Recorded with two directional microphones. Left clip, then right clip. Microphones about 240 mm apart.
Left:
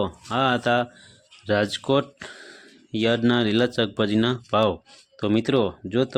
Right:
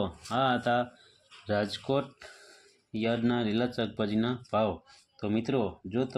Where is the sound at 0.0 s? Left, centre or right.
Left.